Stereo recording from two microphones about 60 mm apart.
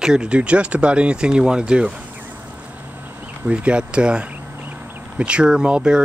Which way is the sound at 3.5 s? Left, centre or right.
Centre.